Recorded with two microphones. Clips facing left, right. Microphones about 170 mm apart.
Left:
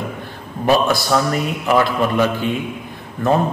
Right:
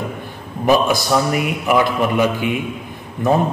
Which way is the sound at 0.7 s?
15° right (ahead or behind).